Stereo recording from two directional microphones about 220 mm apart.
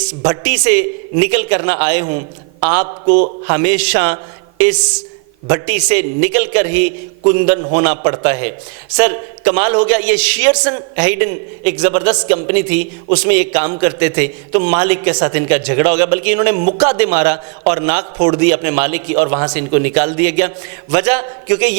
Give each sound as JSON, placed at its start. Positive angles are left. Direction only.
{"t": 0.7, "sound": "a man's voice", "side_deg": -10}
{"t": 16.6, "sound": "a man's voice", "side_deg": -35}
{"t": 16.9, "sound": "a man's voice", "side_deg": -15}